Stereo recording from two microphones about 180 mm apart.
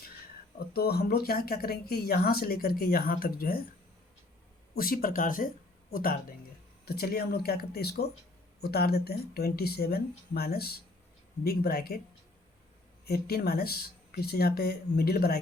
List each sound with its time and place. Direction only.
0.7 s speech: 60° left (ahead or behind)
4.7 s speech: 55° left (ahead or behind)
13.1 s speech: 60° left (ahead or behind)